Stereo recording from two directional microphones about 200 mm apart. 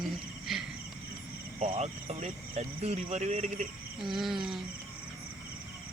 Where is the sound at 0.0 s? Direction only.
Centre (ahead or behind).